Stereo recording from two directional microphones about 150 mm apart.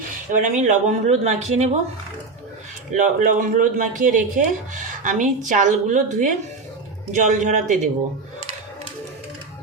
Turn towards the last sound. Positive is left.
turn(degrees=-55)  # may be behind; listen again after turning